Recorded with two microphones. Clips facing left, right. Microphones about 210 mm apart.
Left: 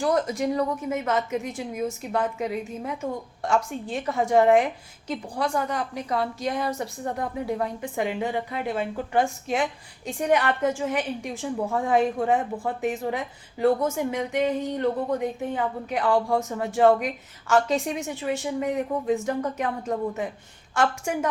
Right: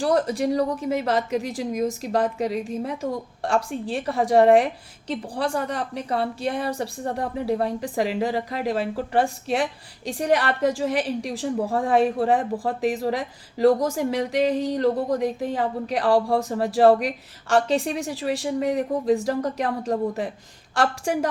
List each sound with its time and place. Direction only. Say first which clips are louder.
0.0 s a woman's voice: right 2 dB; 35° right (ahead or behind)